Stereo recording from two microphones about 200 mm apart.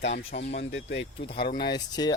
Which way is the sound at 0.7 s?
65° left (ahead or behind).